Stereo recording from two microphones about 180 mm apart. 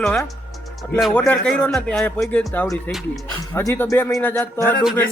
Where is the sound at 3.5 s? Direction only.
10° left (ahead or behind).